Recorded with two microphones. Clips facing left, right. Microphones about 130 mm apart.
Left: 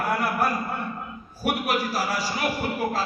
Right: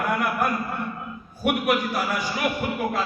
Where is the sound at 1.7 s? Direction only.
30° left (ahead or behind).